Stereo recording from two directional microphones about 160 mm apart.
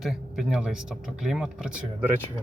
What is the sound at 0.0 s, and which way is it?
Speech, centre (ahead or behind).